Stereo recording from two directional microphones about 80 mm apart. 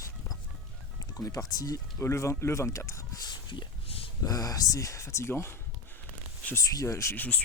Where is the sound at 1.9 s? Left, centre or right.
Left.